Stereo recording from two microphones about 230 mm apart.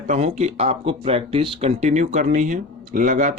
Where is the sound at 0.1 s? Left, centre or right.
Right.